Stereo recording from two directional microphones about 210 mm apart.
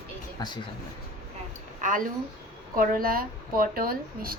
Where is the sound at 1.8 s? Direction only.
40° right (ahead or behind).